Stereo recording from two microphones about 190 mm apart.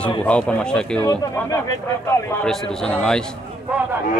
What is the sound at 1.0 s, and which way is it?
Speech, 20° left (ahead or behind).